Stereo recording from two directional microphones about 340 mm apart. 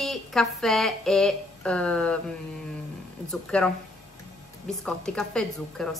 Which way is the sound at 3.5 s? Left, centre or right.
Centre.